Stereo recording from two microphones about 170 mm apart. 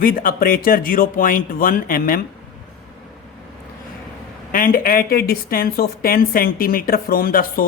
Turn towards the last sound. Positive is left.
turn(degrees=60)  # may be behind; listen again after turning